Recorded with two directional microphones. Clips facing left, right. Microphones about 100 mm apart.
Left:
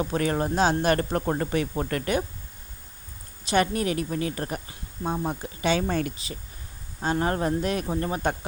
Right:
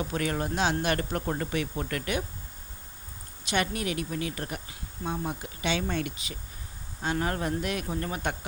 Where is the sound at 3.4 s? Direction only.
35° left (ahead or behind).